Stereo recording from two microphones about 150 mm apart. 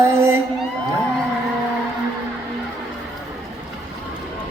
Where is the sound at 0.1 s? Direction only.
15° right (ahead or behind).